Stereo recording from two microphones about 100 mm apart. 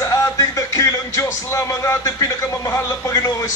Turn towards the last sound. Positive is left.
turn(degrees=35)  # may be behind; listen again after turning